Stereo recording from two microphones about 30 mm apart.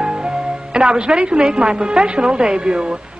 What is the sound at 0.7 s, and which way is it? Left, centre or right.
A woman's voice, right.